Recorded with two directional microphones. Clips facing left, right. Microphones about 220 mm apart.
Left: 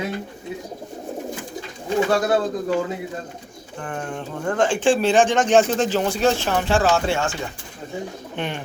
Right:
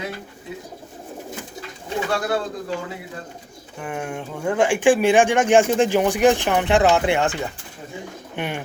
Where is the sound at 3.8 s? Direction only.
10° right (ahead or behind).